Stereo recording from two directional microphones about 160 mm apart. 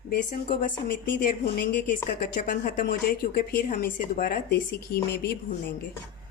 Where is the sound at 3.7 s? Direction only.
60° left (ahead or behind); by 5.0 s 80° left.